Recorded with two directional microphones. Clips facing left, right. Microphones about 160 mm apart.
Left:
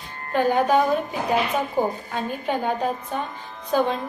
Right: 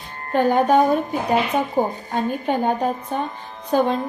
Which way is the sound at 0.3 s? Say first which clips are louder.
Right 3 dB; 45° right (ahead or behind).